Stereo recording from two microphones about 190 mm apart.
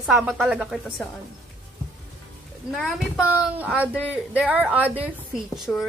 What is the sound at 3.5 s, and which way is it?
Speech, 10° right (ahead or behind).